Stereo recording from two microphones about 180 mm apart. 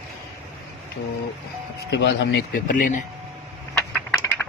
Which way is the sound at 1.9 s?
80° left.